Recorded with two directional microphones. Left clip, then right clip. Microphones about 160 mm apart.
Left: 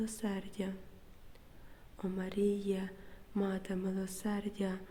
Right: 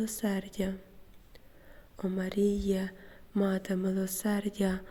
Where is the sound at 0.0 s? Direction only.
30° right (ahead or behind).